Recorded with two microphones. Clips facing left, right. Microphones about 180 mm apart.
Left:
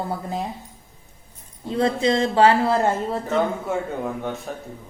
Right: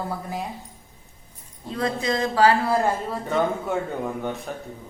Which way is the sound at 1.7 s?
25° left (ahead or behind).